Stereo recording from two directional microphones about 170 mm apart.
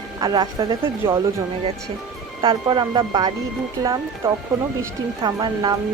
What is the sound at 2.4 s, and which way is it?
Speech, 30° right (ahead or behind).